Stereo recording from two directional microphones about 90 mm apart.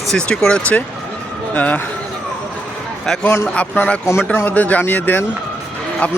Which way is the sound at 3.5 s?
15° left (ahead or behind).